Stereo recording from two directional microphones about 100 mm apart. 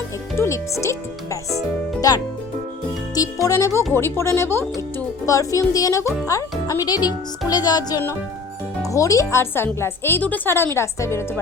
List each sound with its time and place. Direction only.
0.3 s speech: 30° left (ahead or behind)
3.4 s speech: 30° left (ahead or behind)